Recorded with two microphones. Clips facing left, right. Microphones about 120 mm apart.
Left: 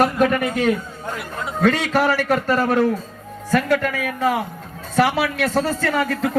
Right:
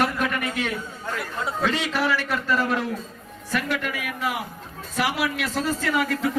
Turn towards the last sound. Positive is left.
turn(degrees=40)  # may be behind; listen again after turning